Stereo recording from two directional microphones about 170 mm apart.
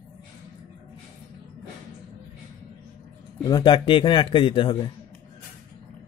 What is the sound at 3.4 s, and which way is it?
A man's voice, 25° left (ahead or behind).